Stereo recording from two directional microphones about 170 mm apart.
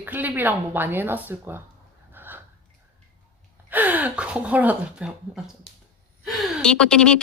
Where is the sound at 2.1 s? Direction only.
10° right (ahead or behind).